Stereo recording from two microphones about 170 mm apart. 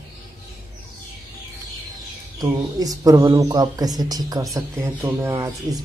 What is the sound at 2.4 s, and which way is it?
Speech, 20° right (ahead or behind).